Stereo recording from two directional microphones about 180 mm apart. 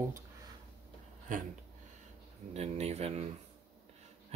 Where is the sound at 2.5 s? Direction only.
35° right (ahead or behind).